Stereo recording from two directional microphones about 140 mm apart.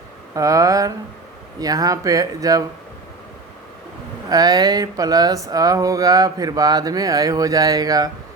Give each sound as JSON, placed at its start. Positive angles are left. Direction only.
{"t": 0.3, "sound": "speech", "side_deg": -25}
{"t": 4.3, "sound": "speech", "side_deg": -25}